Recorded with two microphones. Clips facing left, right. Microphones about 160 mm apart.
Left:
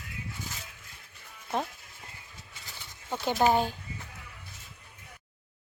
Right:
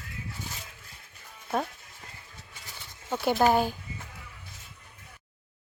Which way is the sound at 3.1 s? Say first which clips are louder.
Right 4 dB; 15° right (ahead or behind).